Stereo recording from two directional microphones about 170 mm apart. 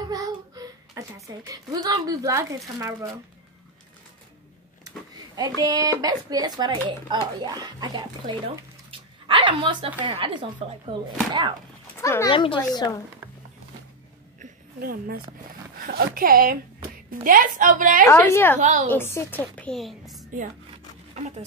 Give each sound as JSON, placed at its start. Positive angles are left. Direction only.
{"t": 0.0, "sound": "a sound", "side_deg": -20}
{"t": 5.3, "sound": "speech", "side_deg": -20}
{"t": 8.9, "sound": "dog", "side_deg": -30}
{"t": 10.0, "sound": "speech", "side_deg": -30}
{"t": 12.0, "sound": "speech", "side_deg": 15}
{"t": 12.3, "sound": "speech", "side_deg": 30}
{"t": 14.4, "sound": "a sound", "side_deg": -60}
{"t": 15.8, "sound": "a woman's voice", "side_deg": -60}
{"t": 18.0, "sound": "a woman's voice", "side_deg": 15}
{"t": 18.6, "sound": "a woman's voice", "side_deg": -45}
{"t": 18.9, "sound": "a woman's voice", "side_deg": 15}
{"t": 21.1, "sound": "speech", "side_deg": -40}